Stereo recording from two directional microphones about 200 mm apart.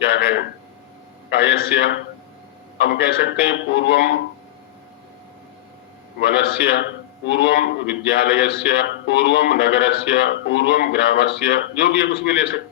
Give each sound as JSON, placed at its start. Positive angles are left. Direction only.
{"t": 0.0, "sound": "a sound", "side_deg": 50}
{"t": 1.3, "sound": "a man's voice", "side_deg": 55}
{"t": 6.2, "sound": "a man's voice", "side_deg": 55}